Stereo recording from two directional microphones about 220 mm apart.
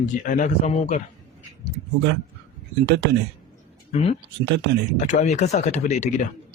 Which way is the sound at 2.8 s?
50° right (ahead or behind).